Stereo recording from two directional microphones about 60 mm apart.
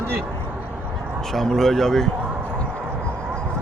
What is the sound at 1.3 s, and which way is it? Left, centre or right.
Speech, centre.